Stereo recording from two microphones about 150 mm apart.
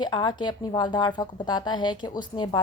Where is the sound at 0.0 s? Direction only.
30° left (ahead or behind).